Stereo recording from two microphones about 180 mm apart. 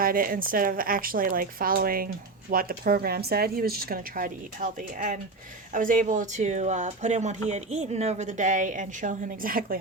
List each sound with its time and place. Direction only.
0.0 s speech: 55° right (ahead or behind)